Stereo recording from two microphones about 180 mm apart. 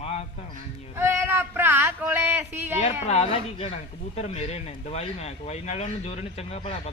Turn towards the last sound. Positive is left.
turn(degrees=35)  # may be behind; listen again after turning